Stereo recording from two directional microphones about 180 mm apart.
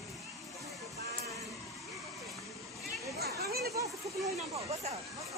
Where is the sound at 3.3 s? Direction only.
60° right (ahead or behind).